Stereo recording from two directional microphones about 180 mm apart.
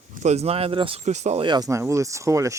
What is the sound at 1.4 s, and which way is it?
Speech, 20° right (ahead or behind).